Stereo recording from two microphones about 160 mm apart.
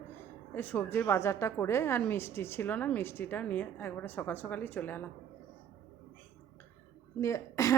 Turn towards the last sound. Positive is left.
turn(degrees=20)  # may be behind; listen again after turning